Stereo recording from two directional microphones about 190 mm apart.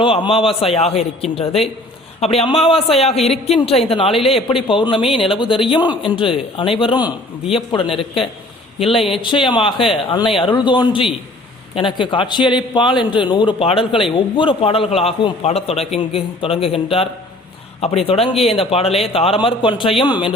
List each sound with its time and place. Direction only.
0.0 s a man's voice: 30° left (ahead or behind)
2.2 s a man's voice: 30° left (ahead or behind)